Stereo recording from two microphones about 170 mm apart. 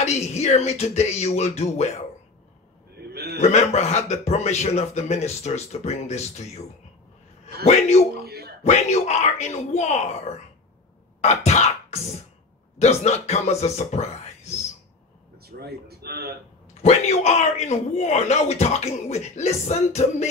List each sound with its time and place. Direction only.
0.0 s a man's voice: 40° left (ahead or behind)
3.1 s a sound: 70° right (ahead or behind)
3.3 s a man's voice: 40° left (ahead or behind)
8.2 s a sound: 70° right (ahead or behind)
8.6 s a man's voice: 40° left (ahead or behind)
11.1 s music: 40° left (ahead or behind)
12.7 s speech: 40° left (ahead or behind)
15.4 s a sound: 65° right (ahead or behind)
16.8 s a man's voice: 40° left (ahead or behind)